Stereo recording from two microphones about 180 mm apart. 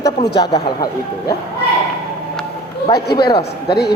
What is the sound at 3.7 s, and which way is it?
Speech, 65° left (ahead or behind).